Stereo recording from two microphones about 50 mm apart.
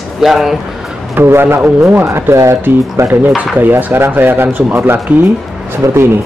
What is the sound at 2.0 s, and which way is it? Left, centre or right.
Speech, right.